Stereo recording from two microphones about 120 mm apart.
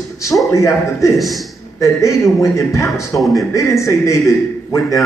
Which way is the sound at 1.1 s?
Centre (ahead or behind).